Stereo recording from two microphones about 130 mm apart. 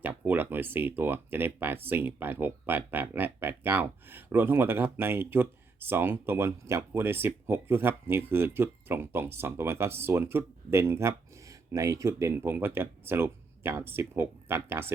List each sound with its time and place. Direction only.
0.0 s speech: 15° right (ahead or behind)